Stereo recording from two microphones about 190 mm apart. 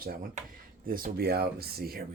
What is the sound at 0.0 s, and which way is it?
Speech, 50° right (ahead or behind).